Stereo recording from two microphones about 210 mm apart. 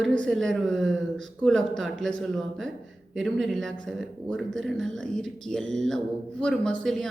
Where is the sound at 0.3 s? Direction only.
Centre (ahead or behind).